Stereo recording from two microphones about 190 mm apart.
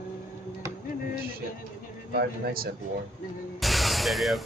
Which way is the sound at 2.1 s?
50° right (ahead or behind).